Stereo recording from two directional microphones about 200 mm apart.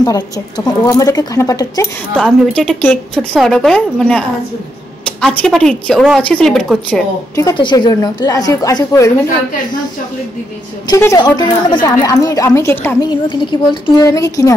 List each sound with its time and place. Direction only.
0.0 s a woman's voice: 20° left (ahead or behind)
2.1 s a woman's voice: 5° left (ahead or behind)
7.3 s a woman's voice: 20° left (ahead or behind)
10.9 s a woman's voice: 15° left (ahead or behind)